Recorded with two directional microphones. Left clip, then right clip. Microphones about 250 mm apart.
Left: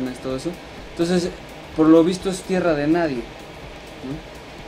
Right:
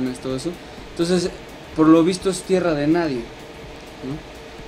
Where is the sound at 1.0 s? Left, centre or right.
Right.